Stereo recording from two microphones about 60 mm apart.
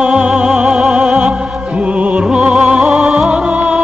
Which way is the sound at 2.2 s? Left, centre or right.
Centre.